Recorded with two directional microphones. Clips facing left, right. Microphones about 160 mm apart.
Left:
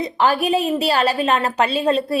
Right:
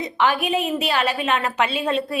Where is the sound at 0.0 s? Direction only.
35° left (ahead or behind).